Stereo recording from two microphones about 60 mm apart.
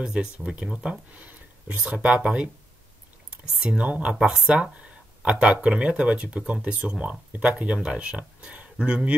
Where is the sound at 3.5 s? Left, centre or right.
Centre.